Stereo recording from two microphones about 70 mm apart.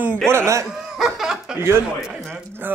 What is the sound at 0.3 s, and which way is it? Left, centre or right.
Speech, right.